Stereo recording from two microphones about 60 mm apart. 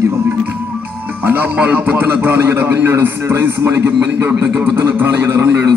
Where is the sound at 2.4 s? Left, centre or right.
Right.